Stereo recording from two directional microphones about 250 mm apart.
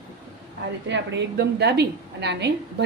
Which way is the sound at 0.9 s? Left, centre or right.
Right.